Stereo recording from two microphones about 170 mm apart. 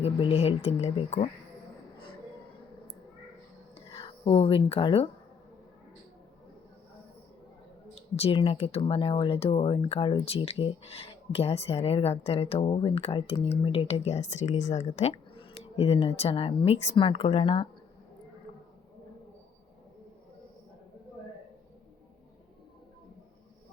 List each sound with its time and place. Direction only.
0.0 s speech: 35° left (ahead or behind)
3.9 s speech: 30° left (ahead or behind)
8.1 s speech: 35° left (ahead or behind)